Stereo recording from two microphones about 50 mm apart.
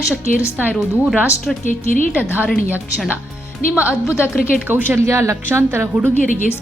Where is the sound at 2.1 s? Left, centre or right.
Right.